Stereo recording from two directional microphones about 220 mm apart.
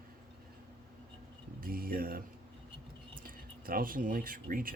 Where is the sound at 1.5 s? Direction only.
40° right (ahead or behind).